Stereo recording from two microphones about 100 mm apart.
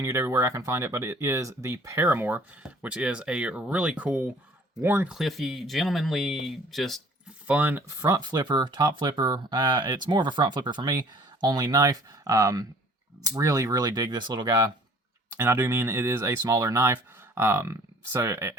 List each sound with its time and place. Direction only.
0.0 s speech: 30° right (ahead or behind)
5.0 s speech: centre (ahead or behind)
7.4 s speech: 15° right (ahead or behind)
7.9 s speech: 35° right (ahead or behind)
15.4 s speech: 25° right (ahead or behind)